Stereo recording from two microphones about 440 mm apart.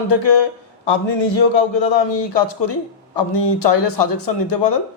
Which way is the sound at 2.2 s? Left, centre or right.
Left.